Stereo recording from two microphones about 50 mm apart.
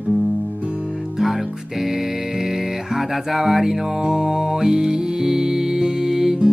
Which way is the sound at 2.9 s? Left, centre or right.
Centre.